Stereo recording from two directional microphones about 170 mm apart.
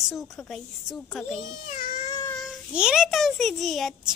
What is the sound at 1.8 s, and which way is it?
Baby cry, 50° left (ahead or behind).